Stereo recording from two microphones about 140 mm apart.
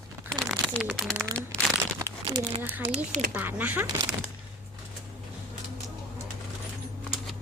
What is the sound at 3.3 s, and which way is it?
Speech, 10° right (ahead or behind).